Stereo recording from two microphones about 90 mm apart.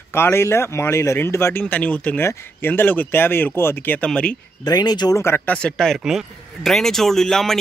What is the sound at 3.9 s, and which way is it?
Speech, 10° left (ahead or behind).